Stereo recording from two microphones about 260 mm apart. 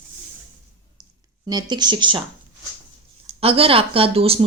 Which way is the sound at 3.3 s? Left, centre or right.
Right.